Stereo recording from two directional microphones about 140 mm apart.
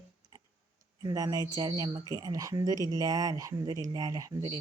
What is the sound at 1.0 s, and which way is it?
Speech, 25° right (ahead or behind).